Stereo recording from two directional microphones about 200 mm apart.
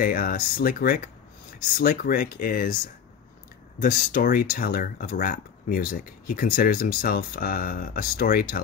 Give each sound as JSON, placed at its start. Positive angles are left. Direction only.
{"t": 0.0, "sound": "speech", "side_deg": 45}
{"t": 3.8, "sound": "speech", "side_deg": 45}